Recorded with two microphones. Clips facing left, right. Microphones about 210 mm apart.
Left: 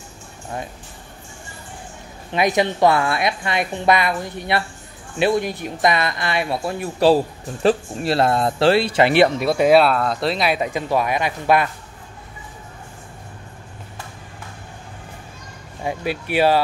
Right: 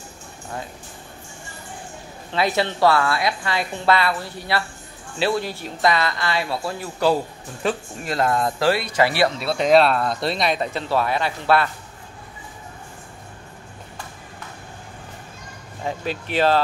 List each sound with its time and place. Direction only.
2.3 s speech: 15° left (ahead or behind)
15.8 s speech: 10° left (ahead or behind)